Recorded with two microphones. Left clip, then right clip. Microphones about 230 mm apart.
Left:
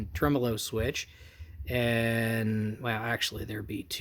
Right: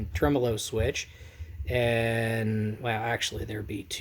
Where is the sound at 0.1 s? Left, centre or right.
Left.